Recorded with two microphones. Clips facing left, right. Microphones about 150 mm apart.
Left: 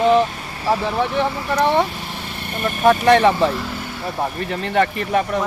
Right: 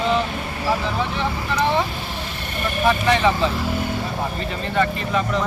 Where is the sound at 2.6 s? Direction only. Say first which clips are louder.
Left 4 dB; 50° left (ahead or behind).